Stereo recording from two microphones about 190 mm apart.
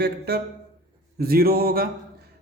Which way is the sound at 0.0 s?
55° right (ahead or behind).